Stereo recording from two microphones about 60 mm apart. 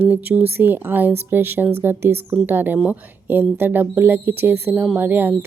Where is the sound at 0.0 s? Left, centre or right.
Right.